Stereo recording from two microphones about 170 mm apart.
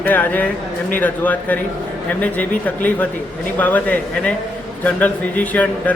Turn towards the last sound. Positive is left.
turn(degrees=10)  # may be behind; listen again after turning